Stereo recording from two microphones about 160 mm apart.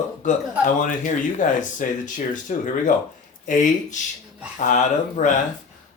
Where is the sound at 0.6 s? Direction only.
55° left (ahead or behind).